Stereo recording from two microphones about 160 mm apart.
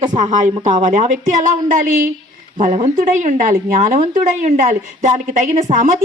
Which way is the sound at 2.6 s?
45° right (ahead or behind).